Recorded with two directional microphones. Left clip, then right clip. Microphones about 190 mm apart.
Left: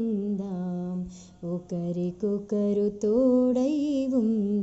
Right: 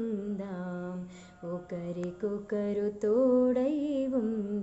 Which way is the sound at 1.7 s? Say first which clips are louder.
Left 5 dB; 35° left (ahead or behind).